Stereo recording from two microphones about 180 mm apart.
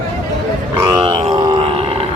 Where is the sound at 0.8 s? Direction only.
25° right (ahead or behind).